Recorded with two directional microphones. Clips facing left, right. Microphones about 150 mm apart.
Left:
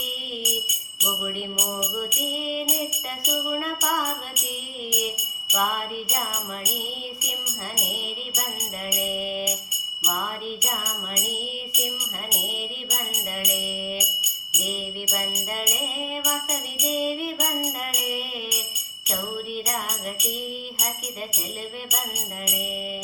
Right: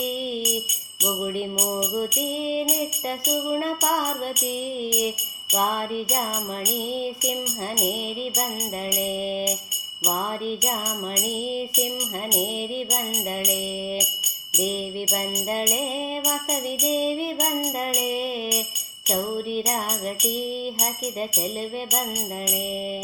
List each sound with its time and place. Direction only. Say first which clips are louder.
1.0 s music: right 5 dB; 40° right (ahead or behind)
3.2 s music: right 3 dB; 40° right (ahead or behind)
9.0 s music: right 2 dB; 40° right (ahead or behind)
10.6 s music: right 5 dB; 40° right (ahead or behind)
14.2 s music: right 9 dB; 45° right (ahead or behind)
19.6 s music: right 4 dB; 40° right (ahead or behind)